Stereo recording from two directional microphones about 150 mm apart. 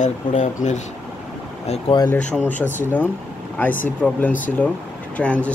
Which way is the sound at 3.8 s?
10° left (ahead or behind).